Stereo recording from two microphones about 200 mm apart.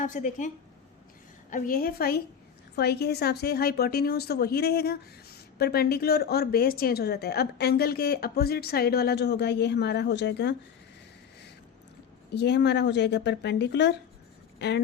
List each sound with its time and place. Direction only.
0.0 s a woman's voice: 40° left (ahead or behind); by 10.5 s 60° left (ahead or behind)
12.3 s speech: 60° left (ahead or behind)